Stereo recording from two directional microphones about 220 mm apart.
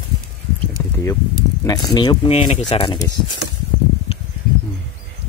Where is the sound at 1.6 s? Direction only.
15° left (ahead or behind).